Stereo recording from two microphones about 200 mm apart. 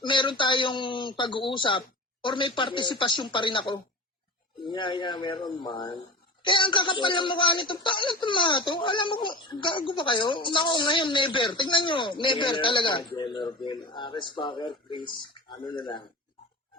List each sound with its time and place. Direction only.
0.0 s speech: 25° left (ahead or behind)